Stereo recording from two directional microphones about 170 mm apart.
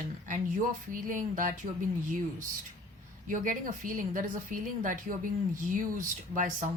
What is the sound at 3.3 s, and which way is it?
A woman's voice, 50° right (ahead or behind).